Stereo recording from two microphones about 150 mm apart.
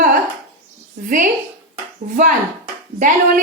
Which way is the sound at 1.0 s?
65° right (ahead or behind).